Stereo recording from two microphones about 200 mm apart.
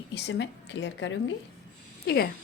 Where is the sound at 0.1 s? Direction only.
60° left (ahead or behind).